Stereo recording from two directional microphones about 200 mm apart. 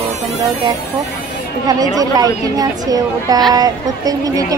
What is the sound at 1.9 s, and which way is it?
Speech, 20° right (ahead or behind).